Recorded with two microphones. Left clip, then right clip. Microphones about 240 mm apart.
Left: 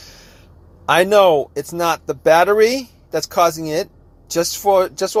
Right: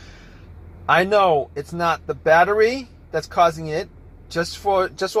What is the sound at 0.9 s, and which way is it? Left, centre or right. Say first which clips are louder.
Speech: left 4 dB; left.